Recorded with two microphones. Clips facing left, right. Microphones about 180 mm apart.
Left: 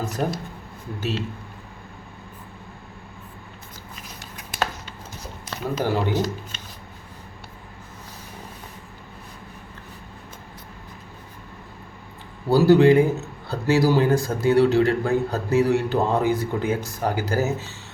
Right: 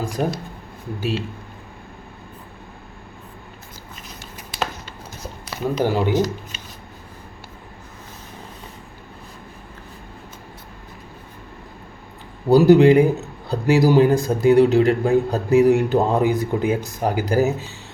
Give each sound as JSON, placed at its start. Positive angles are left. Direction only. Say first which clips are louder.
{"t": 0.9, "sound": "a man's voice", "louder": "right 3 dB", "side_deg": -10}
{"t": 5.5, "sound": "speech", "louder": "right 4 dB", "side_deg": -15}
{"t": 12.5, "sound": "a man's voice", "louder": "right 3 dB", "side_deg": -20}